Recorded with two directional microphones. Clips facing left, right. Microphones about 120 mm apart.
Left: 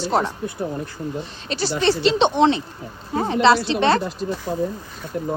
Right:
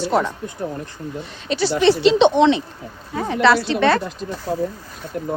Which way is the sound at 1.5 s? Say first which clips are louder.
Right 4 dB; 40° left (ahead or behind).